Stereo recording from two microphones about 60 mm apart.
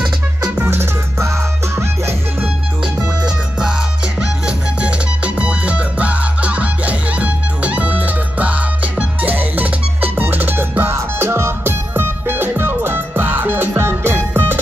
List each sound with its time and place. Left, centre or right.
0.7 s music: right
2.4 s music: centre; by 10.7 s right
10.8 s music: right
11.9 s music: right